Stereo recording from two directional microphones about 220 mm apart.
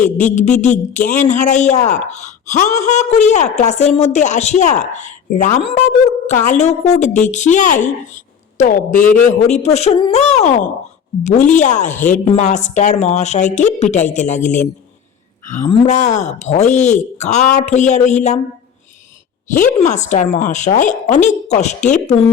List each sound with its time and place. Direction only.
0.0 s a woman's voice: 35° left (ahead or behind)
19.7 s a woman's voice: 30° left (ahead or behind)